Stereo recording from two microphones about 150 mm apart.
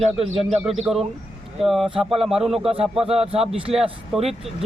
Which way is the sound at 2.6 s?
40° right (ahead or behind).